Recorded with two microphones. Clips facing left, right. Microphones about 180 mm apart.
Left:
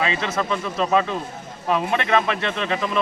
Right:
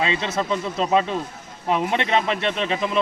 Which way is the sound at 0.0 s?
20° right (ahead or behind).